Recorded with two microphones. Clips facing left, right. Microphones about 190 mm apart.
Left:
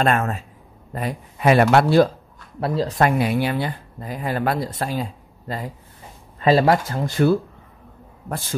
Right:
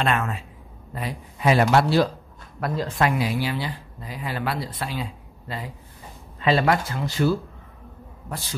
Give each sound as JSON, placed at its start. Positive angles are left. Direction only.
{"t": 0.0, "sound": "speech", "side_deg": 45}
{"t": 2.6, "sound": "speech", "side_deg": 35}